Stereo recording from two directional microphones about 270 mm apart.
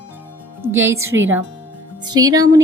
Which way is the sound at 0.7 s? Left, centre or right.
Centre.